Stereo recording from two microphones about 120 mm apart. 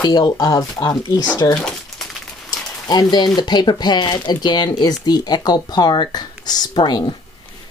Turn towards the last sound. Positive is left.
turn(degrees=40)  # may be behind; listen again after turning